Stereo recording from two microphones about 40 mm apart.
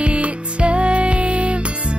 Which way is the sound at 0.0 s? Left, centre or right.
Right.